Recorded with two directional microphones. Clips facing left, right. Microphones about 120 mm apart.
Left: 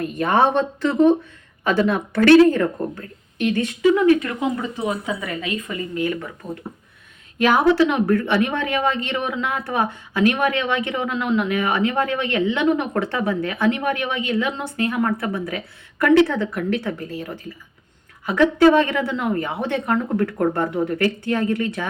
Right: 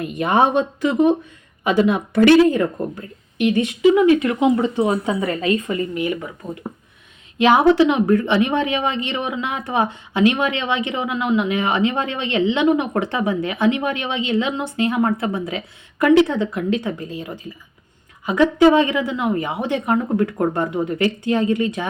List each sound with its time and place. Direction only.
0.0 s a woman's voice: 15° right (ahead or behind)
8.9 s speech: 55° left (ahead or behind)
9.1 s a woman's voice: 15° right (ahead or behind)